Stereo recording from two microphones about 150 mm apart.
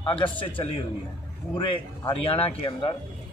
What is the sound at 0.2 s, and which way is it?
Speech, 35° left (ahead or behind).